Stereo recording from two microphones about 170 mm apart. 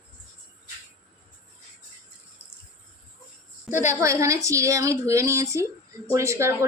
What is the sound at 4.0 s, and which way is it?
Speech, 15° right (ahead or behind).